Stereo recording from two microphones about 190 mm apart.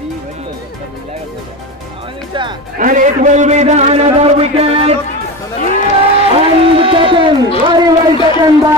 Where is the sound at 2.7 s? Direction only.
45° right (ahead or behind); by 5.0 s 30° right (ahead or behind).